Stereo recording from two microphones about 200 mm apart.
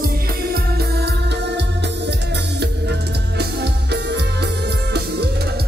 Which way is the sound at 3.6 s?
55° right (ahead or behind).